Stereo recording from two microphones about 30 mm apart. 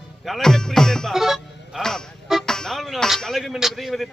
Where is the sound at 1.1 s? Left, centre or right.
Centre.